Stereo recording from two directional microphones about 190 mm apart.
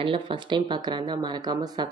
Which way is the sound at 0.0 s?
25° right (ahead or behind).